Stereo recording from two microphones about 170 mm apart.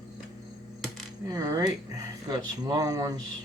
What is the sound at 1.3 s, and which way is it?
Speech, 20° right (ahead or behind).